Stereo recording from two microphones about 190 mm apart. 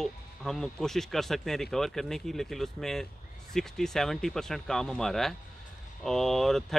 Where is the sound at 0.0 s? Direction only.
Centre (ahead or behind).